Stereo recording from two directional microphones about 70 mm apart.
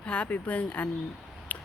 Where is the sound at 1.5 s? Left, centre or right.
Left.